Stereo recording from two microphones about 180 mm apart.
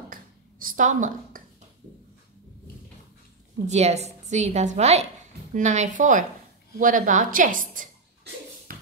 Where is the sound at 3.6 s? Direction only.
40° right (ahead or behind).